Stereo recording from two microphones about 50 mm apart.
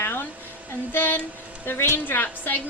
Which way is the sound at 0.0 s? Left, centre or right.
Left.